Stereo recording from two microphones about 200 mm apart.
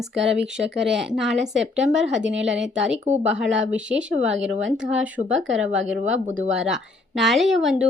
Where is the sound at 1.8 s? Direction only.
70° right (ahead or behind).